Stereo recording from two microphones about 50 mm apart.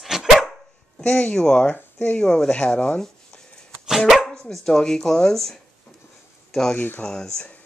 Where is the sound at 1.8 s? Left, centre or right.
Left.